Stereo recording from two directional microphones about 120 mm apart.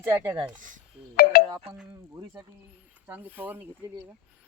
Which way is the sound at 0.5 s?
90° right.